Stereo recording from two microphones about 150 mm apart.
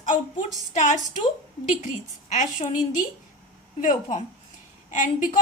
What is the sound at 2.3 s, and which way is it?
A woman's voice, 55° left (ahead or behind).